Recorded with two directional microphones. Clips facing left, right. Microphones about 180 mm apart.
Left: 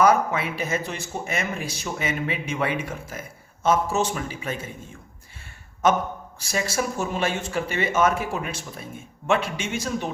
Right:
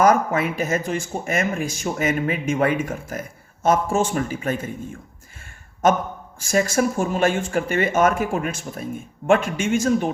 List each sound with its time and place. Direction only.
0.0 s speech: 50° right (ahead or behind)
6.4 s speech: 50° right (ahead or behind)